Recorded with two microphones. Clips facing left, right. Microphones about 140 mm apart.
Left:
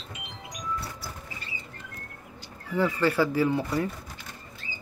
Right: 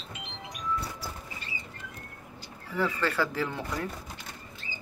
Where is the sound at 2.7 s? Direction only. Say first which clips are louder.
Left 4 dB; 15° left (ahead or behind).